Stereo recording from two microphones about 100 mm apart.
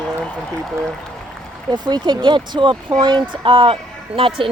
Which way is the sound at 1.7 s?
45° right (ahead or behind).